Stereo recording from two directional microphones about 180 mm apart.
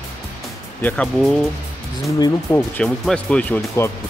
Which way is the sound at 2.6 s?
5° left (ahead or behind).